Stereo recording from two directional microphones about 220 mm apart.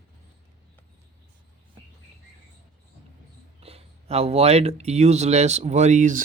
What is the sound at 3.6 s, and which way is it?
Speech, 25° right (ahead or behind).